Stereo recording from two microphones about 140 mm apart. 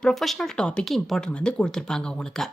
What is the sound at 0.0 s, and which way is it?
A woman's voice, centre (ahead or behind).